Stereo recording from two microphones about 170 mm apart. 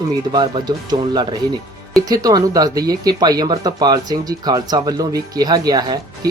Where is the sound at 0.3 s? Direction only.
25° right (ahead or behind).